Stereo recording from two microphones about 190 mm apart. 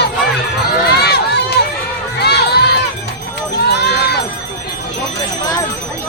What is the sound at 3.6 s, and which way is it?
Run, 60° left (ahead or behind).